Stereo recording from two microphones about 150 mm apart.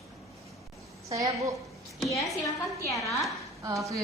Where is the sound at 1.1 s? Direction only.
20° right (ahead or behind).